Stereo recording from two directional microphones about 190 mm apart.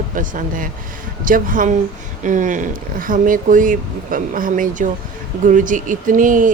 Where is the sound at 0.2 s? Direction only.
45° right (ahead or behind).